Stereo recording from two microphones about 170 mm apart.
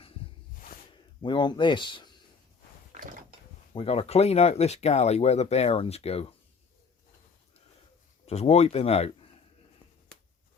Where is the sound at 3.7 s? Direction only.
35° left (ahead or behind).